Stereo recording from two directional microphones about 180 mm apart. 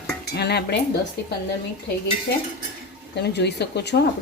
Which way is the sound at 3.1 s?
70° left (ahead or behind).